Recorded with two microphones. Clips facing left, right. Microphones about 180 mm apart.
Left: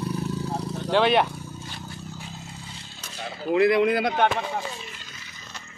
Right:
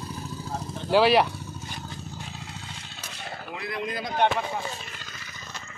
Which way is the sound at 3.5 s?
75° left (ahead or behind).